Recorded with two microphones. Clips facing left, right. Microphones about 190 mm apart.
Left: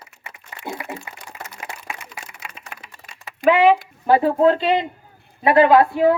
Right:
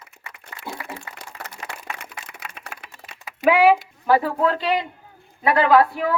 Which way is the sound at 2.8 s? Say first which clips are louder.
Right 1 dB; 60° right (ahead or behind).